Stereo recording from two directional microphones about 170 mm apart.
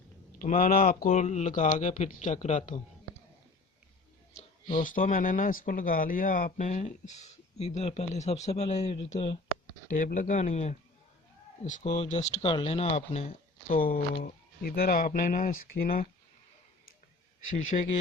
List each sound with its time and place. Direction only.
0.3 s speech: 55° left (ahead or behind)
1.1 s speech: 40° left (ahead or behind)
4.4 s speech: 50° left (ahead or behind)
9.9 s speech: 50° left (ahead or behind)
17.7 s speech: 45° left (ahead or behind)